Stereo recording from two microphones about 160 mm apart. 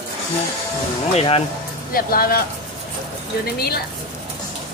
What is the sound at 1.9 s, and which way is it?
Speech, 65° left (ahead or behind).